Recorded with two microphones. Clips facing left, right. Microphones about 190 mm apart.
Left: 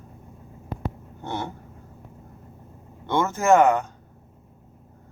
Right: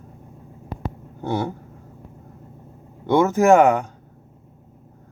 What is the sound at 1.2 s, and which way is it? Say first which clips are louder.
Speech: right 7 dB; 10° right (ahead or behind).